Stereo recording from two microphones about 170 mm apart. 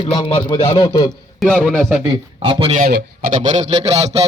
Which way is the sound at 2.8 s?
65° right (ahead or behind).